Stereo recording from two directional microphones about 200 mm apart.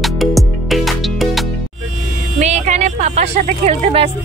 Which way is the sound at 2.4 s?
35° right (ahead or behind).